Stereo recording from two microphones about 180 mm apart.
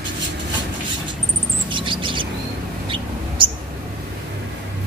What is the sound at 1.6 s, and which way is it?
Bird, 25° right (ahead or behind).